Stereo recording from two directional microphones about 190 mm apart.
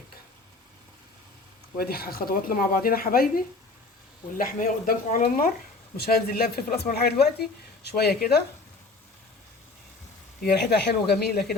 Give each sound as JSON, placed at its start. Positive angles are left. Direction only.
{"t": 1.8, "sound": "speech", "side_deg": 55}
{"t": 10.4, "sound": "speech", "side_deg": 60}